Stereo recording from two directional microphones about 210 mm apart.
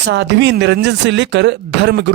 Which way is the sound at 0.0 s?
55° right (ahead or behind).